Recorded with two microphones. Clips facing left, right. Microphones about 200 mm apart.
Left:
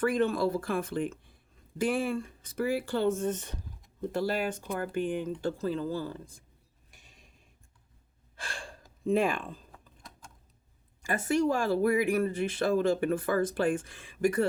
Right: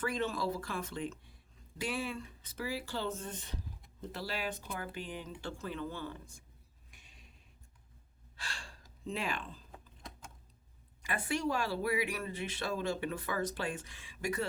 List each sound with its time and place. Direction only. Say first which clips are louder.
0.0 s speech: left 8 dB; 55° left (ahead or behind); by 6.2 s 35° left (ahead or behind)
6.9 s a sound: left 2 dB; 45° left (ahead or behind)
8.4 s speech: left 6 dB; 50° left (ahead or behind)
11.0 s speech: left 8 dB; 45° left (ahead or behind)